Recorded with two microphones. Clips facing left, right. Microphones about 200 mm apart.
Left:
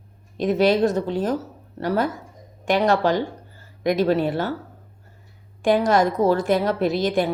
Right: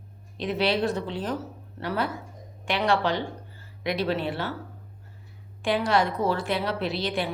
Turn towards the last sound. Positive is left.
turn(degrees=45)  # may be behind; listen again after turning